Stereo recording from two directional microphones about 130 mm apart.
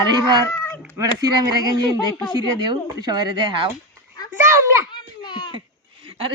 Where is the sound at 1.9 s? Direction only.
30° left (ahead or behind).